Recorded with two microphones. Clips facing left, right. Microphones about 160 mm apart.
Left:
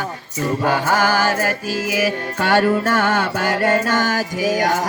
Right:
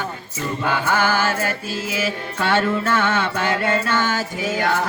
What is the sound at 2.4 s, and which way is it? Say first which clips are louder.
Music: left 3 dB; 45° left (ahead or behind).